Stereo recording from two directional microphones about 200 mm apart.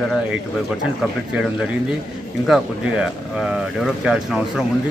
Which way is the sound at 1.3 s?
5° right (ahead or behind).